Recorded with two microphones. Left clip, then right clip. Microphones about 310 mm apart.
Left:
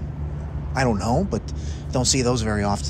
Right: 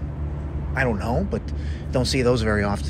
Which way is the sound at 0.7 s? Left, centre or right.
Centre.